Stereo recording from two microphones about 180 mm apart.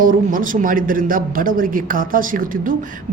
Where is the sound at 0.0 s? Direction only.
50° right (ahead or behind).